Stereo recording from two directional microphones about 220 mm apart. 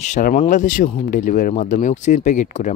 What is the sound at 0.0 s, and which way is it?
A man's voice, 35° left (ahead or behind).